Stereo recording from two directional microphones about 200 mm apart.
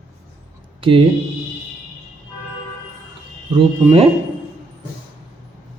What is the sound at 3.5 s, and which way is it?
Speech, 25° right (ahead or behind).